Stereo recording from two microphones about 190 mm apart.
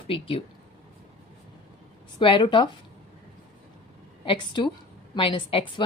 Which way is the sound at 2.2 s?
25° left (ahead or behind).